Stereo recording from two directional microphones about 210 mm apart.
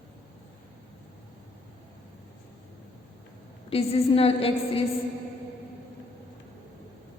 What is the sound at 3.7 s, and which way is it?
A woman's voice, 30° left (ahead or behind).